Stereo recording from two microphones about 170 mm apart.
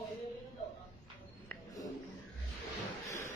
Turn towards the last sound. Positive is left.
turn(degrees=15)  # may be behind; listen again after turning